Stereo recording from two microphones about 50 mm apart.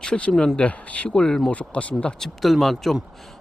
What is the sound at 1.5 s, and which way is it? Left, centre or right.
Speech, left.